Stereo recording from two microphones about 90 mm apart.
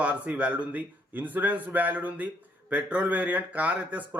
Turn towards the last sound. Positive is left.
turn(degrees=-15)  # may be behind; listen again after turning